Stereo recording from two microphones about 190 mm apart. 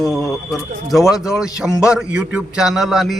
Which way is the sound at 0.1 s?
Centre (ahead or behind).